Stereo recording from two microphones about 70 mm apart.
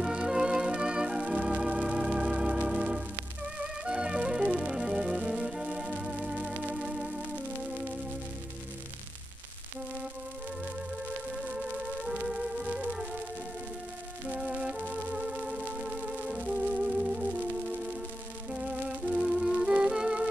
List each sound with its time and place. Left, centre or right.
0.0 s organ: centre
3.8 s music: centre
11.4 s music: centre
14.3 s music: centre
18.5 s music: centre